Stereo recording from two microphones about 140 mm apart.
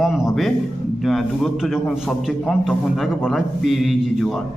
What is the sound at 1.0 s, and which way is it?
A man's voice, centre (ahead or behind).